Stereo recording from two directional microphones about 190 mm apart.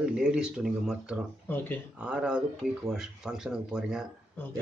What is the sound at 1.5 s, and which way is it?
Speech, 10° left (ahead or behind).